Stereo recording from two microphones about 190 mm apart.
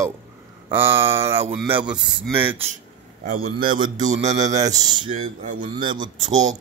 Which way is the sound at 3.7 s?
25° right (ahead or behind).